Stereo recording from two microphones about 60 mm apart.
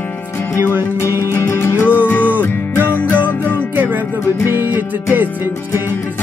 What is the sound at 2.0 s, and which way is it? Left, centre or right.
Music, left.